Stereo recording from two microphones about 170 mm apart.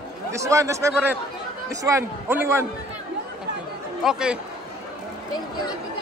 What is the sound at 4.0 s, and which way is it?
Speech, 5° right (ahead or behind).